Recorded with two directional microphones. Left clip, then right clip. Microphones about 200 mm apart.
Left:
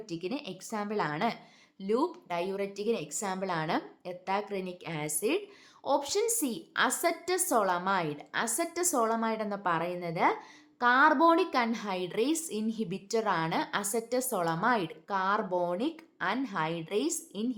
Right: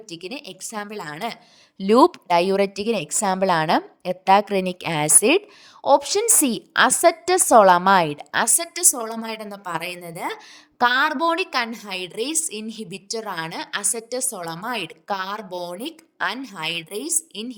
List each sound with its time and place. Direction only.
0.1 s a woman's voice: 40° right (ahead or behind)
5.8 s a woman's voice: 35° right (ahead or behind)
9.4 s a woman's voice: centre (ahead or behind)
9.7 s a woman's voice: 50° right (ahead or behind)
10.0 s a woman's voice: centre (ahead or behind)
10.3 s a woman's voice: 45° right (ahead or behind)
14.3 s a woman's voice: centre (ahead or behind)
14.8 s a woman's voice: 40° right (ahead or behind)